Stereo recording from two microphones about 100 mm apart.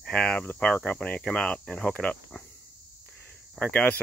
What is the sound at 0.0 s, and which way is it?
Speech, 10° left (ahead or behind).